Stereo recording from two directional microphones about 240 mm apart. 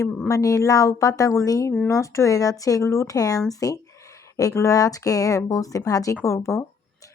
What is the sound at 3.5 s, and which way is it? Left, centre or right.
Speech, centre.